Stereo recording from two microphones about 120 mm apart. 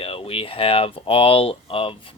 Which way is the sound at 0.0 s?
50° left (ahead or behind).